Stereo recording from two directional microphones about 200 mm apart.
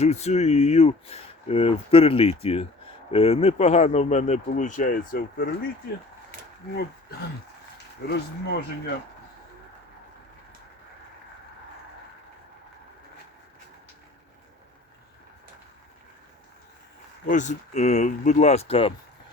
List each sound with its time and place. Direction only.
0.0 s speech: 35° left (ahead or behind); by 5.5 s 50° left (ahead or behind)
8.0 s speech: 55° left (ahead or behind)
17.2 s speech: 40° left (ahead or behind)